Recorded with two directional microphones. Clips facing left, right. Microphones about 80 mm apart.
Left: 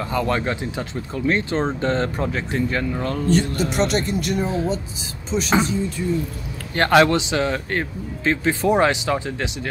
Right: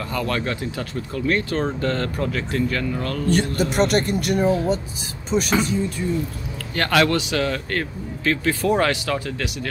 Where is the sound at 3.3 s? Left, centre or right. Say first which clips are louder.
Right 1 dB; right.